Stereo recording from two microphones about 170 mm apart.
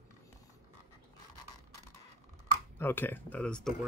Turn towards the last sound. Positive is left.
turn(degrees=5)  # may be behind; listen again after turning